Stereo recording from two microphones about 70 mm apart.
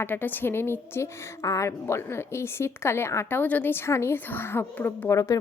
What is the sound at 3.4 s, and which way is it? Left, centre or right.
Speech, left.